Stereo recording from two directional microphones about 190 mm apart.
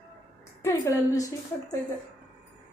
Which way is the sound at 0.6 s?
15° left (ahead or behind).